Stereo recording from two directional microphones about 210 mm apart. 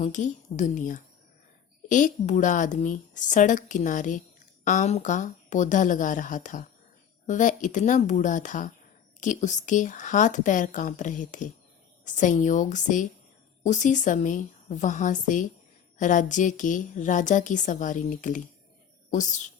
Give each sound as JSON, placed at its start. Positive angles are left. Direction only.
{"t": 0.0, "sound": "a woman's voice", "side_deg": 35}